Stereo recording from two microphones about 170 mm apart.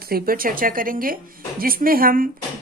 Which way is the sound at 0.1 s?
55° right (ahead or behind).